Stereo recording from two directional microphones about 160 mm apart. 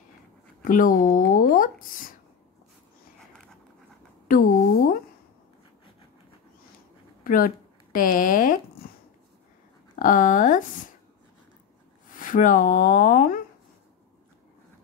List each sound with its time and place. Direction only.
0.7 s speech: 55° left (ahead or behind)
4.3 s a sound: 60° left (ahead or behind)
7.2 s speech: 60° left (ahead or behind)
9.9 s speech: 55° left (ahead or behind)
12.2 s speech: 55° left (ahead or behind)